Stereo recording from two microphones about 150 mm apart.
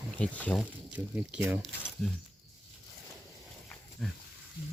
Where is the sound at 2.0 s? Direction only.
5° left (ahead or behind).